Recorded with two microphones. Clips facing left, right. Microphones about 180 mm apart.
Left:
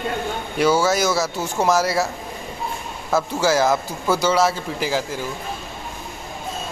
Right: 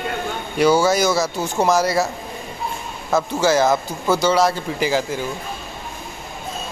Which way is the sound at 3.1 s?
5° left (ahead or behind).